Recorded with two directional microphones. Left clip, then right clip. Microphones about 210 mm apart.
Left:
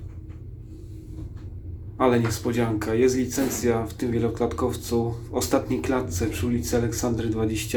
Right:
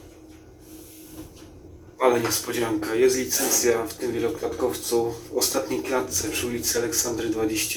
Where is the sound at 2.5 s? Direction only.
10° left (ahead or behind).